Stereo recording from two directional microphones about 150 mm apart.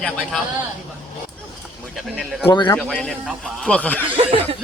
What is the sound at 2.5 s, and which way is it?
Speech, 35° left (ahead or behind).